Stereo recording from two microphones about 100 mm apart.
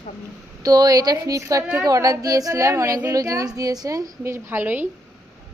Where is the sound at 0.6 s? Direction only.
40° right (ahead or behind).